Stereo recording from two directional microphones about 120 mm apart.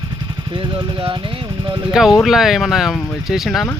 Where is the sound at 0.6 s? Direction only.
45° right (ahead or behind).